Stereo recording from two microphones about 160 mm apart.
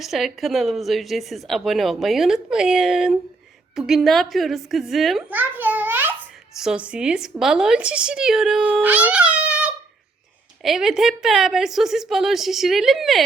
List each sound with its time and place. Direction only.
0.0 s a child's voice: centre (ahead or behind)